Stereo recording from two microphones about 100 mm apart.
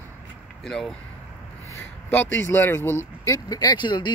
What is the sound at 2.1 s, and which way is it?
Speech, 25° left (ahead or behind).